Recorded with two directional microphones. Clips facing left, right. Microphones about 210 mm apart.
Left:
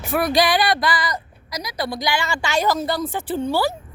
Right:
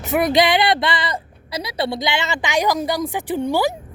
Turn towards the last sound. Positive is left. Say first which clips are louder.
# right 2 dB
turn(degrees=-15)  # may be behind; listen again after turning